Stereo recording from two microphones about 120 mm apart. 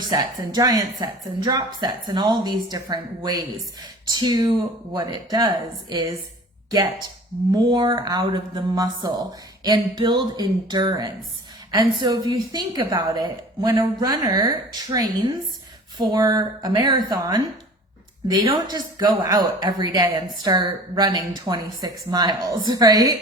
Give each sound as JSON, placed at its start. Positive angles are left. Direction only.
{"t": 0.1, "sound": "a woman's voice", "side_deg": -30}
{"t": 7.5, "sound": "a woman's voice", "side_deg": -40}
{"t": 18.7, "sound": "a woman's voice", "side_deg": -35}